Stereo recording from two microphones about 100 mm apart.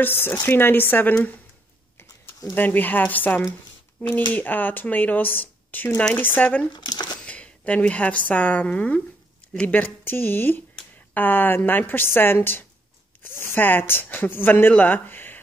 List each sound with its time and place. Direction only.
0.0 s speech: 20° left (ahead or behind)
2.5 s speech: 20° left (ahead or behind)
6.7 s speech: 50° left (ahead or behind)
7.2 s a woman's voice: 10° left (ahead or behind)